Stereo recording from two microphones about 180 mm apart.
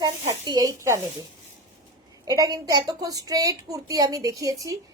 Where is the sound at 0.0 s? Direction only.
20° right (ahead or behind).